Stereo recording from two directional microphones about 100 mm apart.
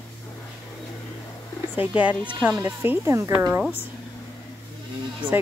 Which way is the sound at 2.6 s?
25° right (ahead or behind).